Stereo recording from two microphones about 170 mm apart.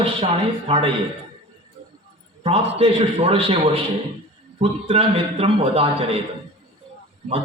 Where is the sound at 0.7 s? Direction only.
30° right (ahead or behind).